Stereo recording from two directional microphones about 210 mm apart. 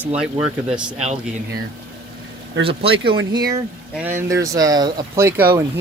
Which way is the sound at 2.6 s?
25° right (ahead or behind).